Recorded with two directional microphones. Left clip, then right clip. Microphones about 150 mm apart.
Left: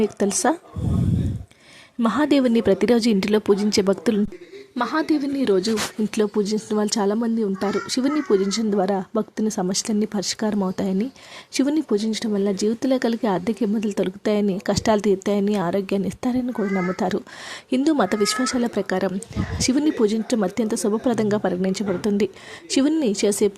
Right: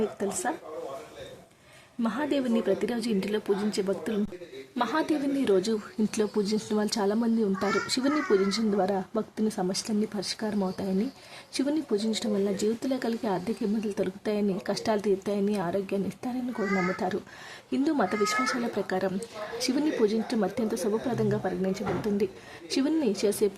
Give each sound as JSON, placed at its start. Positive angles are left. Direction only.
{"t": 0.0, "sound": "speech", "side_deg": 50}
{"t": 2.0, "sound": "speech", "side_deg": 45}
{"t": 4.8, "sound": "speech", "side_deg": 30}